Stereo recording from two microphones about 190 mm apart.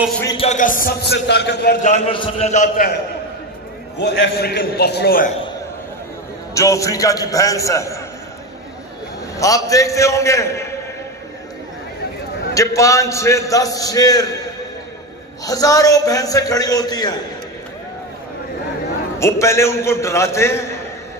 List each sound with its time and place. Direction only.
0.4 s a man's voice: 40° left (ahead or behind); by 1.8 s 60° left (ahead or behind)
1.8 s a man's voice: 40° left (ahead or behind)
4.0 s a man's voice: 60° left (ahead or behind)
6.5 s a man's voice: 15° left (ahead or behind)
9.4 s a man's voice: 15° left (ahead or behind)
12.5 s a man's voice: 15° left (ahead or behind)
15.4 s a man's voice: 20° left (ahead or behind)
19.1 s a man's voice: 15° left (ahead or behind)